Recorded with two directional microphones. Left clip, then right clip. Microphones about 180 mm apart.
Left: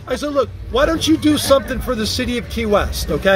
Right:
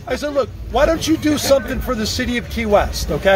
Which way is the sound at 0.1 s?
50° left (ahead or behind).